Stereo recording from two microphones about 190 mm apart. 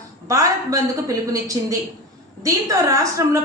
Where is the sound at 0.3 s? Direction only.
15° right (ahead or behind).